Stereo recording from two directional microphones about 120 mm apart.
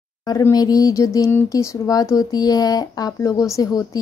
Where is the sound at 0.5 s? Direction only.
30° left (ahead or behind).